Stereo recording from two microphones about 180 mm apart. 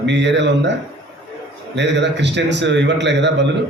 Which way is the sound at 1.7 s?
75° right (ahead or behind).